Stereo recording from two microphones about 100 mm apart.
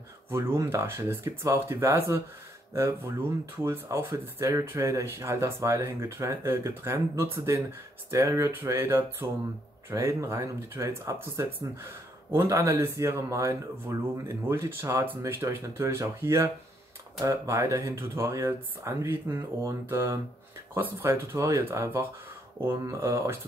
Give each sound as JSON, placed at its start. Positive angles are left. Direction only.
{"t": 0.3, "sound": "speech", "side_deg": -25}